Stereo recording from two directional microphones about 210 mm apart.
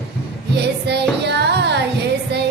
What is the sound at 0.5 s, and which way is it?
Music, 55° right (ahead or behind).